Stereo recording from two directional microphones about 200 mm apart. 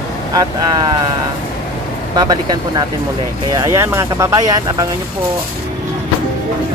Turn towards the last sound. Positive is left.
turn(degrees=-20)  # may be behind; listen again after turning